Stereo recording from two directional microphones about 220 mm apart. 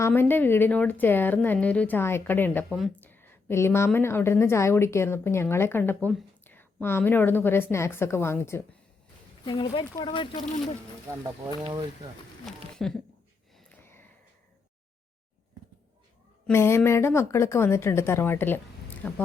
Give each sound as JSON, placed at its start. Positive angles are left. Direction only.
{"t": 0.0, "sound": "a woman's voice", "side_deg": 10}
{"t": 9.4, "sound": "speech", "side_deg": 20}
{"t": 11.2, "sound": "speech", "side_deg": -20}
{"t": 12.5, "sound": "a sound", "side_deg": 0}
{"t": 16.5, "sound": "a woman's voice", "side_deg": 10}